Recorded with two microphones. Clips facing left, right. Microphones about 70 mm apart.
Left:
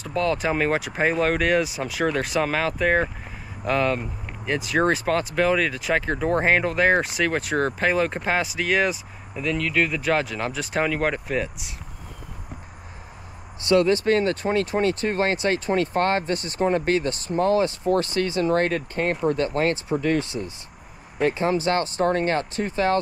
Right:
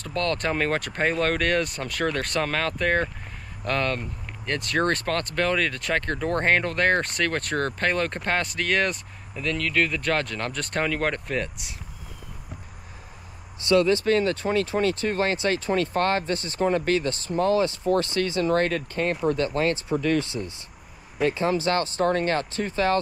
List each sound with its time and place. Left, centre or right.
0.0 s speech: centre
13.7 s speech: left
20.2 s speech: left
21.2 s speech: left